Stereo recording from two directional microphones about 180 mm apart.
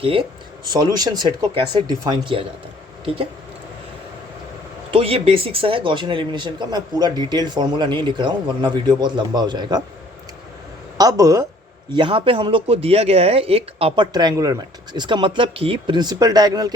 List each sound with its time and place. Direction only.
0.0 s speech: 30° right (ahead or behind)
4.9 s speech: 30° right (ahead or behind)
10.9 s speech: 20° right (ahead or behind)
11.9 s speech: 30° right (ahead or behind)